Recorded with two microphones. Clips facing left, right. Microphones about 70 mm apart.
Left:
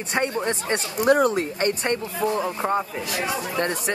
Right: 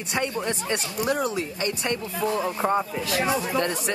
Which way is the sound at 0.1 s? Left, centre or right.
Left.